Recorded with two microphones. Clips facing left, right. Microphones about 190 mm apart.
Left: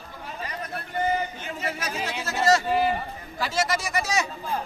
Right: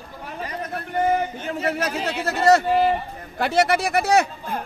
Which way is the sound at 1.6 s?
60° right (ahead or behind).